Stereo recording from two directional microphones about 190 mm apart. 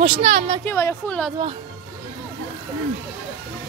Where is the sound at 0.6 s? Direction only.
10° left (ahead or behind).